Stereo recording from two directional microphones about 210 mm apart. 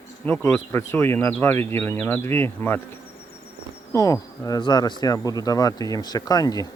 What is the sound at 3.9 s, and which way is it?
Speech, 15° left (ahead or behind).